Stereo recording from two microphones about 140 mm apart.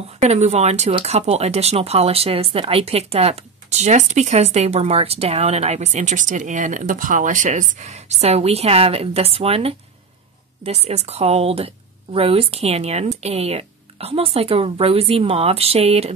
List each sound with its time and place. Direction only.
0.2 s speech: 50° right (ahead or behind)